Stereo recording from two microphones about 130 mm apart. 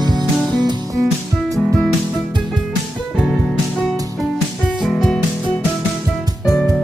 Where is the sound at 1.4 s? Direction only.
Centre (ahead or behind).